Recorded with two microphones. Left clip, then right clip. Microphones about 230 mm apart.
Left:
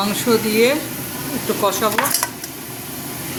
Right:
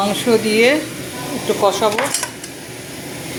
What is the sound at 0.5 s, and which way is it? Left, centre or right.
Speech, centre.